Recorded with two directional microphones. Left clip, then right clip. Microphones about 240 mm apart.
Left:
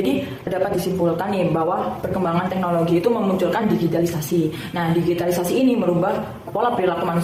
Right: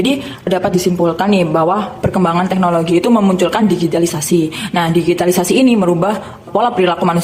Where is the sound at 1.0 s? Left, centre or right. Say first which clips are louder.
Right 6 dB; right.